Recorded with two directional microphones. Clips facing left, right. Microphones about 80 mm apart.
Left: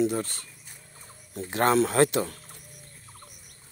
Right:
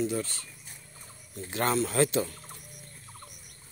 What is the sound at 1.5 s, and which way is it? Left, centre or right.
Speech, left.